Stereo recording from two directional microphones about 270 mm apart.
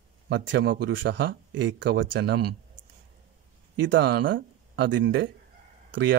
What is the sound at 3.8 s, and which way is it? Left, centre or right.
Speech, right.